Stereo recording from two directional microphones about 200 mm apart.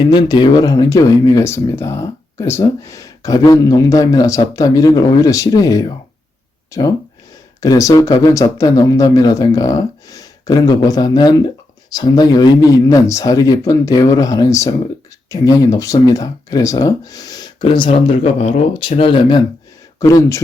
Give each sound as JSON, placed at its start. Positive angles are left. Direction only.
{"t": 0.0, "sound": "speech", "side_deg": 20}